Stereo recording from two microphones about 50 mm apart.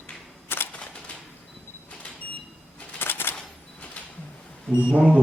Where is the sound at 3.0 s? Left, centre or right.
Left.